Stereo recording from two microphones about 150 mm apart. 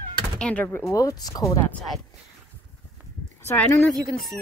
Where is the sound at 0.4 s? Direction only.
10° left (ahead or behind).